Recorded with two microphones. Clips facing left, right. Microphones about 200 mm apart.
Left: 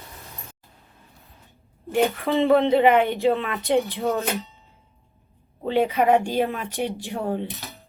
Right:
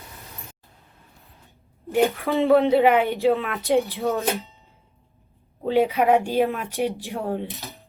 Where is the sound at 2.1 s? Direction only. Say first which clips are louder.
Left 1 dB; centre (ahead or behind).